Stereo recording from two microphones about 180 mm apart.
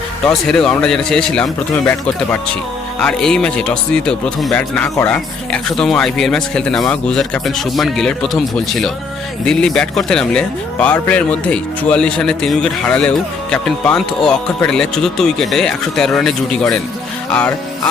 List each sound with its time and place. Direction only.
0.3 s speech: 5° left (ahead or behind)
3.0 s speech: 5° left (ahead or behind)